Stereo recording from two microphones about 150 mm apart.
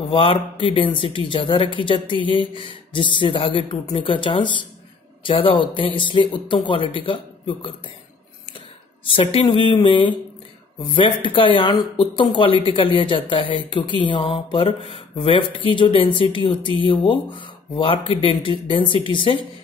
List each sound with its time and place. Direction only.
0.1 s speech: 35° left (ahead or behind)
9.0 s speech: 35° left (ahead or behind)